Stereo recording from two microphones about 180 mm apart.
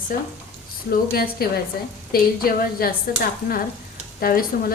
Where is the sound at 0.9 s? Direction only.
55° left (ahead or behind).